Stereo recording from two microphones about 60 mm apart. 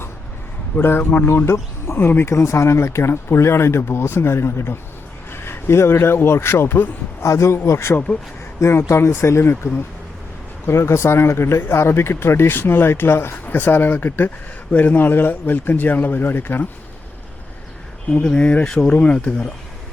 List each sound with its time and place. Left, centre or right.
0.8 s speech: left
1.5 s speech: left
2.3 s a man's voice: left
7.2 s speech: left
7.9 s speech: left
8.6 s speech: left
18.1 s speech: centre
18.7 s speech: centre
18.9 s speech: left